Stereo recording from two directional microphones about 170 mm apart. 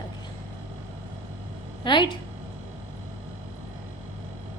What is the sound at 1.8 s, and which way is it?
Speech, 30° left (ahead or behind).